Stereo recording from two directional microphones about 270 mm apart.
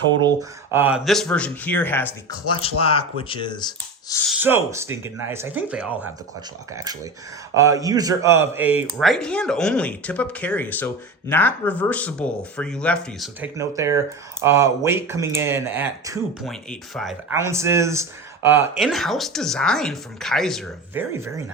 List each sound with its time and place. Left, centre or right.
0.2 s speech: centre
2.5 s speech: left
4.3 s speech: centre
7.5 s speech: centre
13.6 s speech: centre
16.4 s speech: centre
17.3 s speech: centre